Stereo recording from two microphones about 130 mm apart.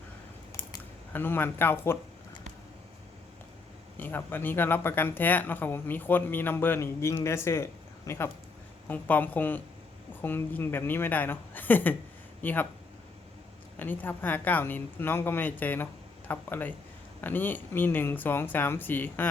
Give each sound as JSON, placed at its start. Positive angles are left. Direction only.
{"t": 1.1, "sound": "speech", "side_deg": 15}
{"t": 3.9, "sound": "speech", "side_deg": 15}
{"t": 13.7, "sound": "speech", "side_deg": 15}